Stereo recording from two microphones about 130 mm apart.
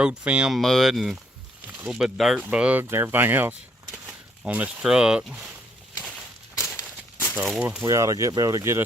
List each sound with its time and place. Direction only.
0.0 s speech: 10° right (ahead or behind)
7.3 s speech: 5° right (ahead or behind)
7.9 s speech: 25° right (ahead or behind)